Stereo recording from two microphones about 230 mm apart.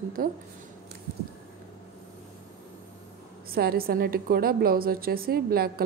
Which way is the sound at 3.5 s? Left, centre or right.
Right.